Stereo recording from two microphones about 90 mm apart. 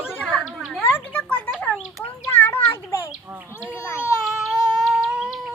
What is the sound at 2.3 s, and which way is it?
Children playing, 25° left (ahead or behind).